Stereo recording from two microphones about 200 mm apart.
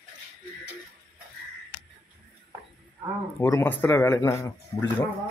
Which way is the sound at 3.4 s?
10° left (ahead or behind).